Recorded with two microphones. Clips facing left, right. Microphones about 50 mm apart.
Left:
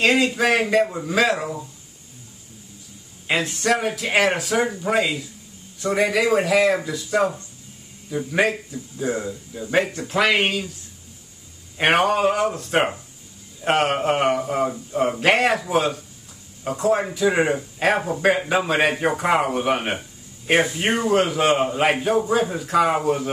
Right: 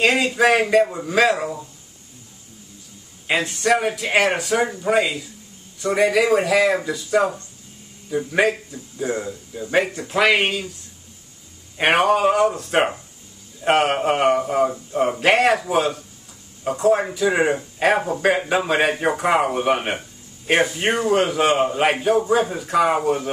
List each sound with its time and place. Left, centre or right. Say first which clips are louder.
0.0 s speech: right 1 dB; centre
3.3 s speech: right 2 dB; centre
11.8 s speech: right 1 dB; centre